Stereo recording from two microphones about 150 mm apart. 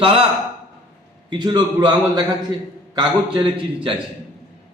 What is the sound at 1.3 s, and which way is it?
A man's voice, 30° right (ahead or behind).